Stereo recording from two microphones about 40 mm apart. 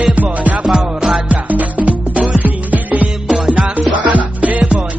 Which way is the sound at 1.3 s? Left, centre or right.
Right.